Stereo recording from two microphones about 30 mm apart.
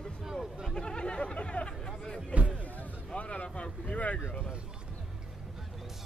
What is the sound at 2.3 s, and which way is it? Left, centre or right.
Speech, right.